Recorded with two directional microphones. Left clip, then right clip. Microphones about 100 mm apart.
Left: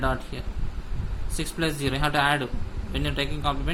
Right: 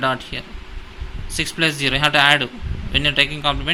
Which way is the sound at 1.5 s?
30° right (ahead or behind).